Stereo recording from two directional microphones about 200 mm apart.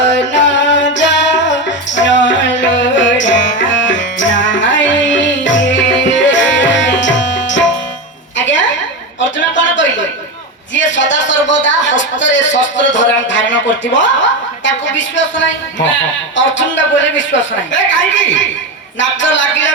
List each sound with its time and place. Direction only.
0.2 s music: 65° left (ahead or behind)
8.4 s a sound: 65° left (ahead or behind)
10.8 s a man's voice: 65° left (ahead or behind)